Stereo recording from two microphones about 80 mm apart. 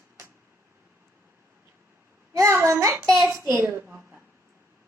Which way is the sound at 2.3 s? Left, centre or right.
Right.